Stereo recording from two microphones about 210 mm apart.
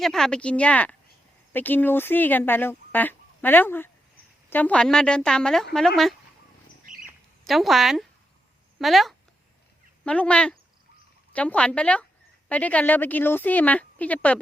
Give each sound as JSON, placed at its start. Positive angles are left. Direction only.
{"t": 0.0, "sound": "a woman's voice", "side_deg": 0}
{"t": 6.8, "sound": "bird", "side_deg": -40}
{"t": 7.4, "sound": "a woman's voice", "side_deg": 0}